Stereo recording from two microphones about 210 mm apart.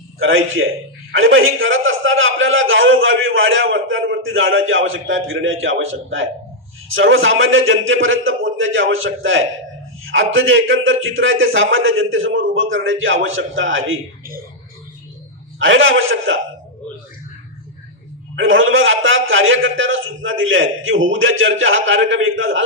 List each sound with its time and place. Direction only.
0.2 s a man's voice: 70° right (ahead or behind)
15.5 s a man's voice: 65° right (ahead or behind)
18.3 s a man's voice: 70° right (ahead or behind)